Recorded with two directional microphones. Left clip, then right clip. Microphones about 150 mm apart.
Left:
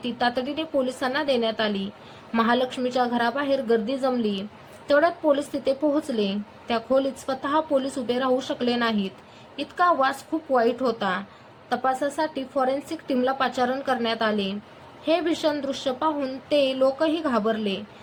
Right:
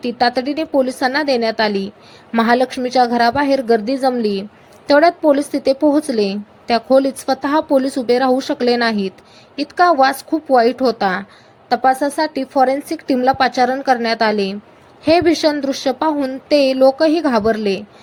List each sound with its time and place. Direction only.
0.0 s a woman's voice: 40° right (ahead or behind)